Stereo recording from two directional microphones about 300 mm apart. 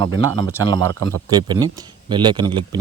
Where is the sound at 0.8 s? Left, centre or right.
Right.